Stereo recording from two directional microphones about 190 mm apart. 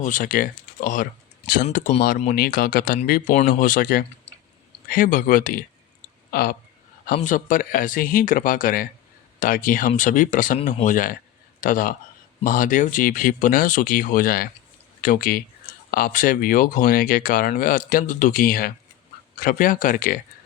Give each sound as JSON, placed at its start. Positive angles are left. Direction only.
{"t": 0.0, "sound": "speech", "side_deg": 45}